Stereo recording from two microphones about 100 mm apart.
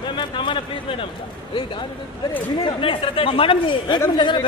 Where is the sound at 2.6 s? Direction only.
60° left (ahead or behind).